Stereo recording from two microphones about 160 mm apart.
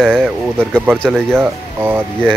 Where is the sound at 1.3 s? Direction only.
15° right (ahead or behind).